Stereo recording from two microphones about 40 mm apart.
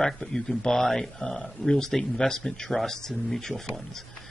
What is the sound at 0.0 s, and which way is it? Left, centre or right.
Speech, centre.